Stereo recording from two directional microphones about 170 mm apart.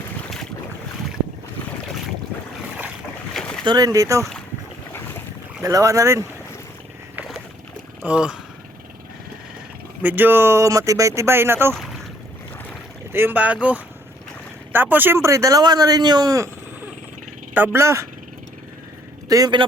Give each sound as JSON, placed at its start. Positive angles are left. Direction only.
{"t": 3.3, "sound": "boat", "side_deg": 5}
{"t": 3.6, "sound": "a man's voice", "side_deg": -25}
{"t": 5.6, "sound": "a man's voice", "side_deg": -20}
{"t": 8.0, "sound": "speech", "side_deg": -5}
{"t": 10.0, "sound": "speech", "side_deg": -10}
{"t": 11.7, "sound": "boat", "side_deg": 0}
{"t": 13.1, "sound": "a man's voice", "side_deg": -10}
{"t": 17.5, "sound": "speech", "side_deg": -10}
{"t": 19.3, "sound": "a man's voice", "side_deg": -25}